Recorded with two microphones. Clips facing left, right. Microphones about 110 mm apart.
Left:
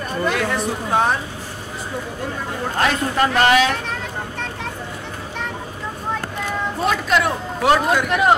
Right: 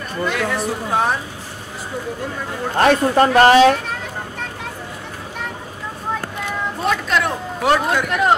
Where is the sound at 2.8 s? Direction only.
40° right (ahead or behind).